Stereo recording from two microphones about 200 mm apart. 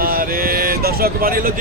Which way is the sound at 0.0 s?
45° right (ahead or behind).